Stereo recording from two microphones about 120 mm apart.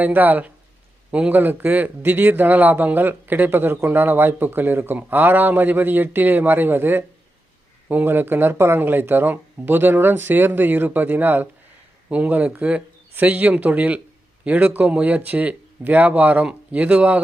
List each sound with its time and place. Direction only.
0.0 s speech: 15° right (ahead or behind)